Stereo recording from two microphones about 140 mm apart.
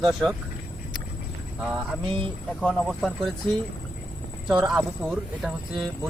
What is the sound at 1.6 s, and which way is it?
Speech, 5° right (ahead or behind).